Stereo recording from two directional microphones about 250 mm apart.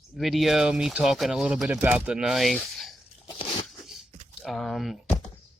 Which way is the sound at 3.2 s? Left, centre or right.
Centre.